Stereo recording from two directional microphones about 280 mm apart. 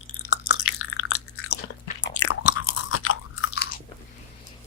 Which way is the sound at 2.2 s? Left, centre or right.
Left.